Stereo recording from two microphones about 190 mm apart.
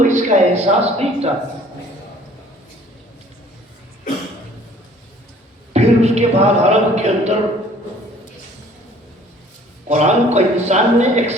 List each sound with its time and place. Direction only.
0.0 s a man's voice: 40° right (ahead or behind)
5.7 s a man's voice: 35° right (ahead or behind)
9.9 s a man's voice: 35° right (ahead or behind)